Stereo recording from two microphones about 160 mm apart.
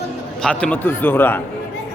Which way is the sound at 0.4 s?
5° left (ahead or behind).